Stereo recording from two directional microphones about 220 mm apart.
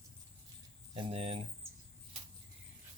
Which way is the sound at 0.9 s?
25° right (ahead or behind).